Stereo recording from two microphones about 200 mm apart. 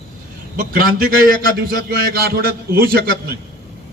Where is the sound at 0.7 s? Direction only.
45° right (ahead or behind).